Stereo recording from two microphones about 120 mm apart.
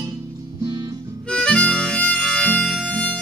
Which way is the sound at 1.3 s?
5° left (ahead or behind).